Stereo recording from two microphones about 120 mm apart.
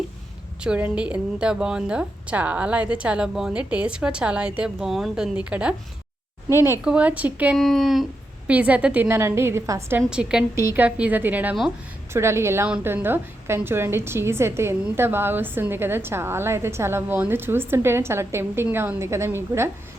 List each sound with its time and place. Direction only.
0.6 s a woman's voice: 10° right (ahead or behind)
6.5 s a woman's voice: 20° right (ahead or behind)
6.8 s a woman's voice: 10° right (ahead or behind)
7.5 s speech: centre (ahead or behind)
8.4 s a woman's voice: 10° right (ahead or behind)
10.1 s a woman's voice: 5° right (ahead or behind)
10.5 s a woman's voice: 20° right (ahead or behind)
10.8 s a woman's voice: 10° right (ahead or behind)